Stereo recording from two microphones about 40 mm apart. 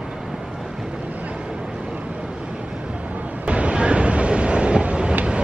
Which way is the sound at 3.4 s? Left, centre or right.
Right.